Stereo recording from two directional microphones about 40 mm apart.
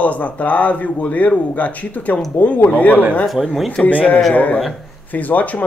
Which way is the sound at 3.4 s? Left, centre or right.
Centre.